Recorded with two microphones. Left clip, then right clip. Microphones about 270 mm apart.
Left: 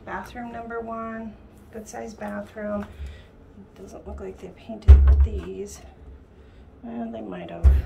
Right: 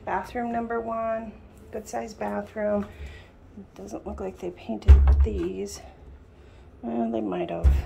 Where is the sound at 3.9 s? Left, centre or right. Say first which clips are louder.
Right 3 dB; centre.